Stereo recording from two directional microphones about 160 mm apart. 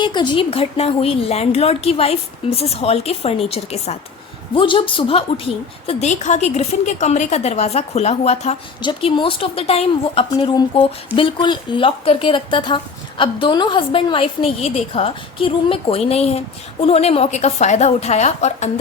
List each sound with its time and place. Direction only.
0.0 s a woman's voice: 30° left (ahead or behind)
8.8 s a woman's voice: 30° left (ahead or behind)